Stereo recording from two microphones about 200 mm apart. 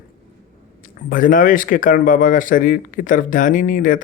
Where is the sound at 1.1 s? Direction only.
40° left (ahead or behind).